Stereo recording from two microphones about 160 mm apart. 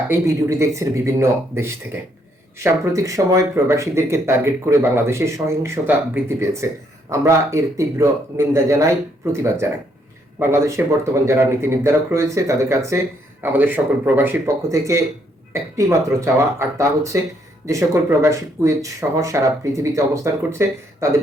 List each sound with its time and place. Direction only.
0.1 s speech: 20° right (ahead or behind)